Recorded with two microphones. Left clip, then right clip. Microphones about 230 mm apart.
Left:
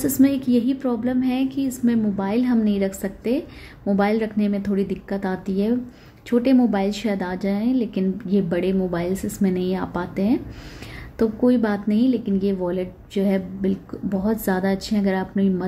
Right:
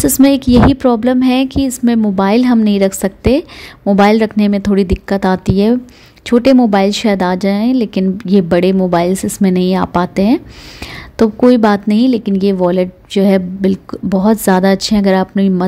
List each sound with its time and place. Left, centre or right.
0.0 s a woman's voice: right